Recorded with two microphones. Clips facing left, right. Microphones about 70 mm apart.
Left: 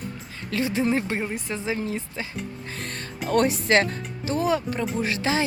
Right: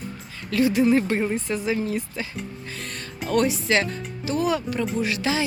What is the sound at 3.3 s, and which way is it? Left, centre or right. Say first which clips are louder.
Speech: left 1 dB; left.